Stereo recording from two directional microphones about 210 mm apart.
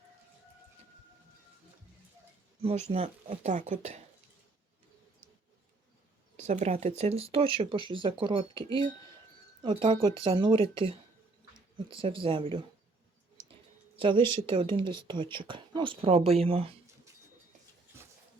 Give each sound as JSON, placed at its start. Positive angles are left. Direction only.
{"t": 2.6, "sound": "speech", "side_deg": -30}
{"t": 6.3, "sound": "speech", "side_deg": -35}
{"t": 12.2, "sound": "speech", "side_deg": -25}
{"t": 13.9, "sound": "speech", "side_deg": -25}